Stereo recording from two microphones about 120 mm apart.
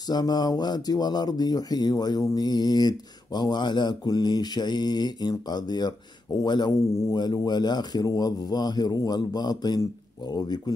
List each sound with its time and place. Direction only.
0.1 s speech: 35° left (ahead or behind)